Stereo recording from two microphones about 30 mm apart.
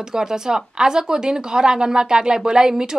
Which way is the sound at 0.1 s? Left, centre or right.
Right.